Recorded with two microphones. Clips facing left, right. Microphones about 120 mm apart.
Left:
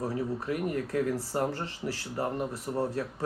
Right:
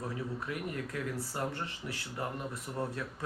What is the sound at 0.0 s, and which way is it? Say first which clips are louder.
Speech: left 6 dB; 35° left (ahead or behind).